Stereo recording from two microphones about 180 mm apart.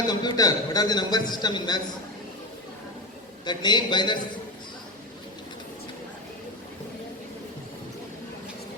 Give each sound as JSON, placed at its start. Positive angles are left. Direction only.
{"t": 0.1, "sound": "a man's voice", "side_deg": 25}
{"t": 3.4, "sound": "a man's voice", "side_deg": 25}